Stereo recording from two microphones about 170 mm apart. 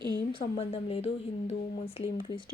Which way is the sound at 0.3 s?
35° left (ahead or behind).